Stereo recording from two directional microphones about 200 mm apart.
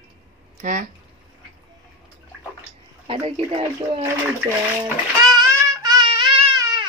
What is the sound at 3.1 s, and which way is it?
Speech, 25° right (ahead or behind).